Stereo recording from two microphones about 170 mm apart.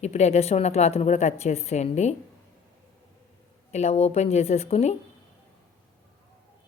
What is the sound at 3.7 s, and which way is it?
Speech, 40° left (ahead or behind).